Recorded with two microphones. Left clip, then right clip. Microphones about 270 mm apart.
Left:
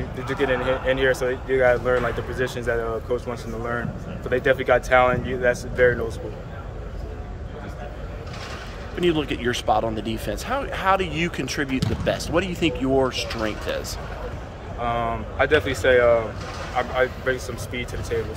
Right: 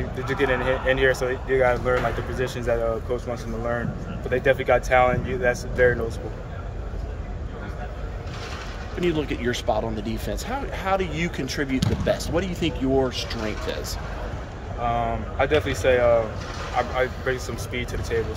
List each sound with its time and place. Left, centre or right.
0.2 s speech: centre
4.3 s speech: centre
9.0 s speech: centre